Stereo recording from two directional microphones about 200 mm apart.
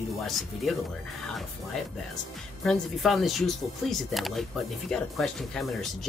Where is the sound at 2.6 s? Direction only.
Centre (ahead or behind).